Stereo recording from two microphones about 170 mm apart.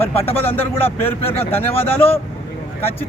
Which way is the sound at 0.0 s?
10° left (ahead or behind).